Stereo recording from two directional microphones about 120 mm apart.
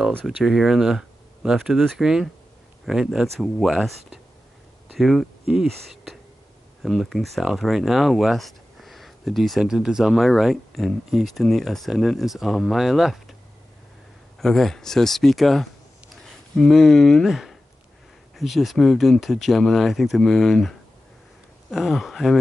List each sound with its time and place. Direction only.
0.1 s speech: 5° left (ahead or behind)
14.4 s speech: 5° left (ahead or behind)